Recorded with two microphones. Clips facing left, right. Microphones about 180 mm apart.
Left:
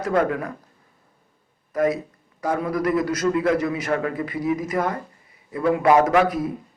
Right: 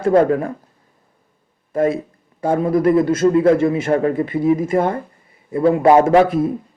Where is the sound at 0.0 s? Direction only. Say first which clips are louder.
Right 8 dB; 30° right (ahead or behind).